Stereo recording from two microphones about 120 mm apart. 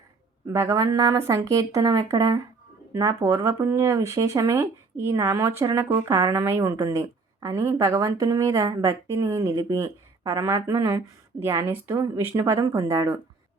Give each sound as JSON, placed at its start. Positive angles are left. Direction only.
{"t": 0.4, "sound": "speech", "side_deg": -20}